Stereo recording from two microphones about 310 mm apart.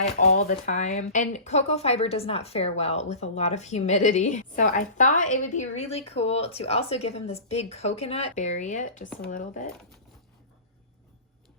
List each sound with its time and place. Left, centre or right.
0.0 s speech: left